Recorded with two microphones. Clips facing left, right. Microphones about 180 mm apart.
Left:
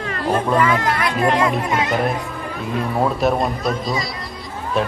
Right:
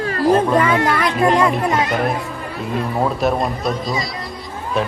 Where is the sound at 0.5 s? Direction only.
30° right (ahead or behind).